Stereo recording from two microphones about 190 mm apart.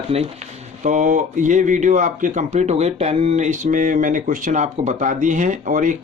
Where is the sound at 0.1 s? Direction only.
30° right (ahead or behind).